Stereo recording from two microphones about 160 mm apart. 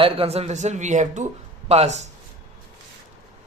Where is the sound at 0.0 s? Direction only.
40° right (ahead or behind).